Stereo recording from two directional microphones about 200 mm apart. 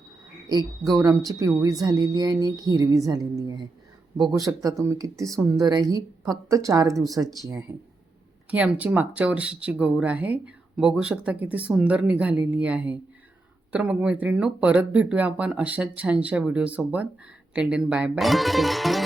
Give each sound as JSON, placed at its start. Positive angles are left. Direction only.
{"t": 0.4, "sound": "a woman's voice", "side_deg": -20}
{"t": 8.4, "sound": "speech", "side_deg": -5}